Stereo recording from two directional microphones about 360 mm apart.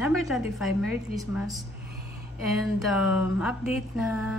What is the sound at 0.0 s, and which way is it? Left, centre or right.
A woman's voice, centre.